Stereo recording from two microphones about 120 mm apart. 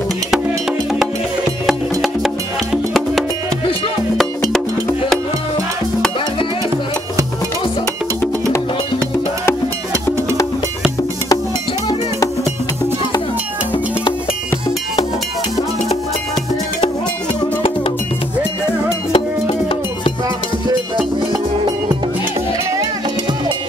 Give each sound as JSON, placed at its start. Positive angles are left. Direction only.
{"t": 1.7, "sound": "music", "side_deg": 0}
{"t": 19.1, "sound": "music", "side_deg": 50}
{"t": 20.9, "sound": "music", "side_deg": -35}